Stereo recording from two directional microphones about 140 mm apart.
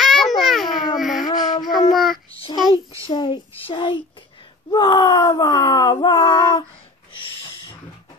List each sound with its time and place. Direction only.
0.0 s a sound: centre (ahead or behind)
1.6 s child singing: centre (ahead or behind)
2.5 s a child's voice: 30° right (ahead or behind)
3.0 s a child's voice: 35° left (ahead or behind)